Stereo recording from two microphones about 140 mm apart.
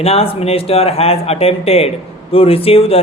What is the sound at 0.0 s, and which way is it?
Speech, 45° left (ahead or behind).